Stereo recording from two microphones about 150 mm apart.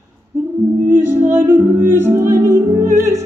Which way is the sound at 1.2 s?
15° right (ahead or behind).